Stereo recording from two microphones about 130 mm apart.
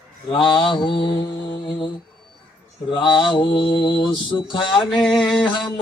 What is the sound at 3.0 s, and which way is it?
Mantra, centre (ahead or behind).